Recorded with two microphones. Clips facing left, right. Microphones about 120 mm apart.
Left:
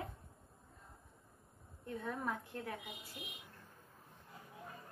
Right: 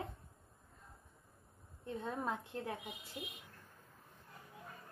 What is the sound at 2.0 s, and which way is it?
Speech, 25° right (ahead or behind).